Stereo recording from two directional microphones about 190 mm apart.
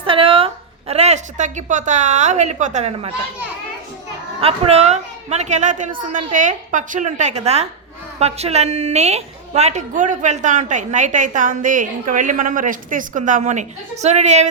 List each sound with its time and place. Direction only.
0.0 s a woman's voice: 30° right (ahead or behind)
4.4 s a woman's voice: 30° right (ahead or behind)